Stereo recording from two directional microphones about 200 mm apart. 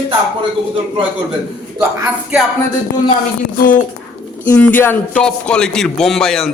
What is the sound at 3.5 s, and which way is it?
Speech, 45° left (ahead or behind).